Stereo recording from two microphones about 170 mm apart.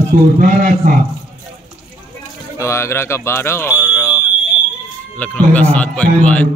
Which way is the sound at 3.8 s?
10° left (ahead or behind).